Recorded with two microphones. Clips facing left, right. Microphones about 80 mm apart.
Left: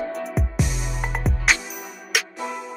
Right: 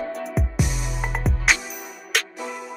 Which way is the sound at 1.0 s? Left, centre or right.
Centre.